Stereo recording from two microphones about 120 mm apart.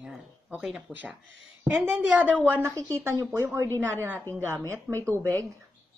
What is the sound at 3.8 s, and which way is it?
Speech, 20° right (ahead or behind).